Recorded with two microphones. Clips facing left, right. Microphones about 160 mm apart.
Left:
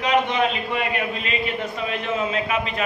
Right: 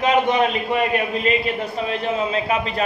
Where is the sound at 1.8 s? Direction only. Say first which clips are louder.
Right 2 dB; 35° right (ahead or behind).